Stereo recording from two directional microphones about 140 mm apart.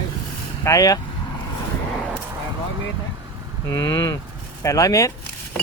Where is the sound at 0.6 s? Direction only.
25° left (ahead or behind).